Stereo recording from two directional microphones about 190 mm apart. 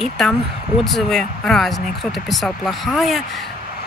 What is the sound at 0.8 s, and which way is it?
Speech, centre (ahead or behind).